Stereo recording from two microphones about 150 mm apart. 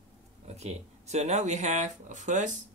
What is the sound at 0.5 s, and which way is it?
Speech, 45° right (ahead or behind).